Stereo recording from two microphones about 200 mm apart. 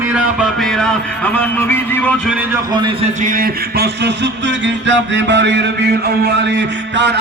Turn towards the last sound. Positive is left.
turn(degrees=-60)  # may be behind; listen again after turning